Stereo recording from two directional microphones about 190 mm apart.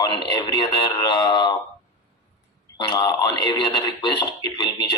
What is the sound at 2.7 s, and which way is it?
A man's voice, 25° left (ahead or behind).